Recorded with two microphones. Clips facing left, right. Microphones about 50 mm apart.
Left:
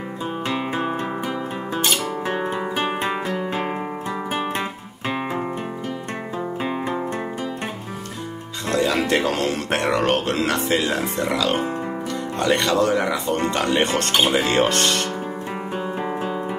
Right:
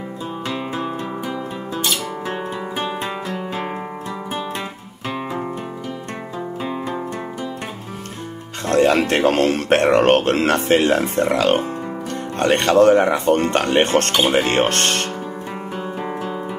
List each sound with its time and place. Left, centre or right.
0.5 s music: left
3.0 s guitar: left
6.6 s music: left
8.6 s speech: right